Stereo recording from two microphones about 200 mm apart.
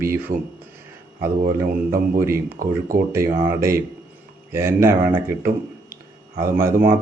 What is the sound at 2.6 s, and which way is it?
Speech, 45° right (ahead or behind).